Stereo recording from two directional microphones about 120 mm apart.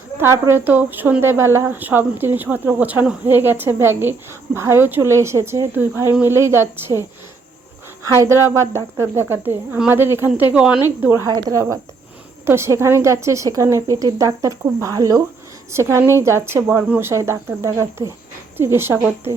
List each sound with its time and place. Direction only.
0.4 s a woman's voice: 15° right (ahead or behind)
8.0 s a woman's voice: 25° right (ahead or behind)
11.3 s a woman's voice: 35° right (ahead or behind)